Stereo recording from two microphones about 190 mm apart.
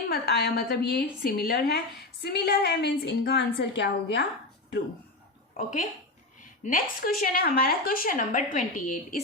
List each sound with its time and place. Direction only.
0.1 s a woman's voice: 60° left (ahead or behind)
5.6 s a woman's voice: 50° left (ahead or behind)